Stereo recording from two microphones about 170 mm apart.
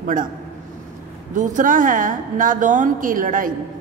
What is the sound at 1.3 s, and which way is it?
A woman's voice, 50° right (ahead or behind).